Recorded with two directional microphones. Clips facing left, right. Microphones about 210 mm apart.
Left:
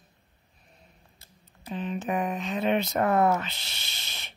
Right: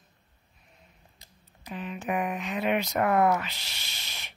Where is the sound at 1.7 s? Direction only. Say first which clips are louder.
Left 2 dB; 25° left (ahead or behind).